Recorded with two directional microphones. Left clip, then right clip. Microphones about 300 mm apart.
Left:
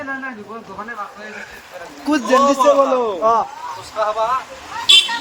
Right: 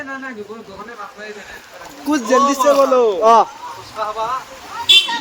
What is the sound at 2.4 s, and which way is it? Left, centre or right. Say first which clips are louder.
Speech: left 1 dB; left.